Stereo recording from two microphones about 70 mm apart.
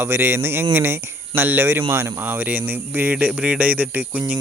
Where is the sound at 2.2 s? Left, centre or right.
Right.